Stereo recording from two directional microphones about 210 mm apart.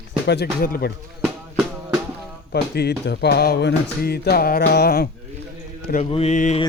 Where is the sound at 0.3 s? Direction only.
45° left (ahead or behind).